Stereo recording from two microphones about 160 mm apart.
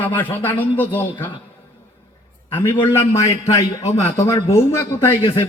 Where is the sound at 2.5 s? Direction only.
15° left (ahead or behind).